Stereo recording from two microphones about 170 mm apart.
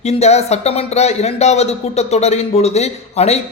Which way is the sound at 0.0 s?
40° left (ahead or behind).